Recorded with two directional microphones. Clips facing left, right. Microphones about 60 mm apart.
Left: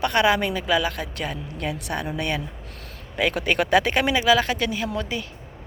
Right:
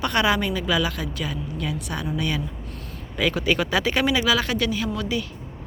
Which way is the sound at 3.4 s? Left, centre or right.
Left.